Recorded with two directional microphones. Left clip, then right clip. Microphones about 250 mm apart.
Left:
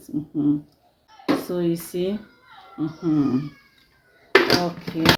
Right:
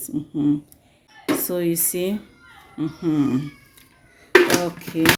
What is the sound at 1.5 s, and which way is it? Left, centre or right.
Speech, right.